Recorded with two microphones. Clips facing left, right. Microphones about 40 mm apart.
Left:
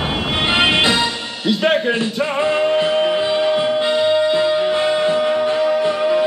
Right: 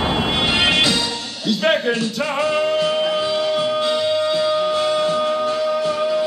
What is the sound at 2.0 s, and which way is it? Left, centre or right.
Music, left.